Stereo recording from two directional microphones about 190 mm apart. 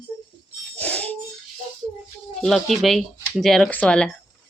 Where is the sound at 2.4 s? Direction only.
Centre (ahead or behind).